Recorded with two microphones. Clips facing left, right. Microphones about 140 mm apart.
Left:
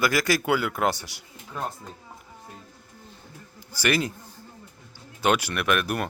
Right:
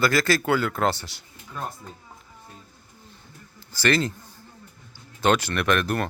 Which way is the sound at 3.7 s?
10° left (ahead or behind).